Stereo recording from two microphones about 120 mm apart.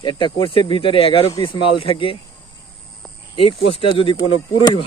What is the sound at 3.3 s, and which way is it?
Speech, 50° left (ahead or behind).